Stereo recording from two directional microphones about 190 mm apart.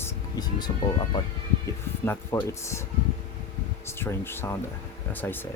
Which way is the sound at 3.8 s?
15° left (ahead or behind).